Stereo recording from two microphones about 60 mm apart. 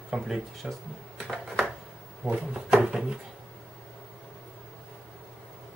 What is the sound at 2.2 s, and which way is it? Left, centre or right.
Speech, centre.